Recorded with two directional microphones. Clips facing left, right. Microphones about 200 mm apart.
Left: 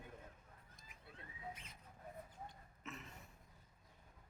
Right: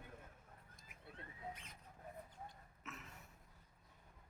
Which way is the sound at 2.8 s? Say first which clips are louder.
Left 3 dB; 5° right (ahead or behind).